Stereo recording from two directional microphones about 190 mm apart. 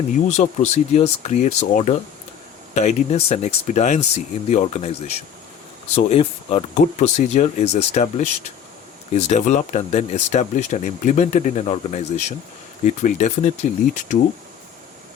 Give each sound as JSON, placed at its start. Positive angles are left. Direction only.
{"t": 0.3, "sound": "speech", "side_deg": 40}